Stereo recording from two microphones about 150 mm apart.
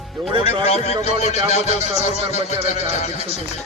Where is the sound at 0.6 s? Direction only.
45° left (ahead or behind).